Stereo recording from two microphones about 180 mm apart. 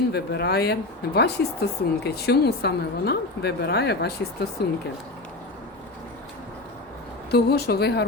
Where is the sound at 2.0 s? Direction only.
65° left (ahead or behind).